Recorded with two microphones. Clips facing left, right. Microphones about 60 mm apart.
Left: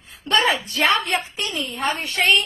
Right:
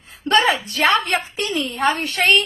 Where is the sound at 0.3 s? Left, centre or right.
Right.